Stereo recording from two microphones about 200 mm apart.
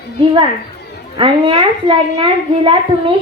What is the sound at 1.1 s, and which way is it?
A child's voice, 25° right (ahead or behind).